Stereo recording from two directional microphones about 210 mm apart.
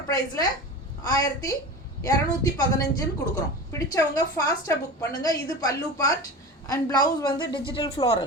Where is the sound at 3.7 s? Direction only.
15° left (ahead or behind).